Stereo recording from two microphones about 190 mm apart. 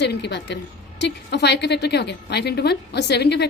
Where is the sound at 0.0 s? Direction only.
65° left (ahead or behind).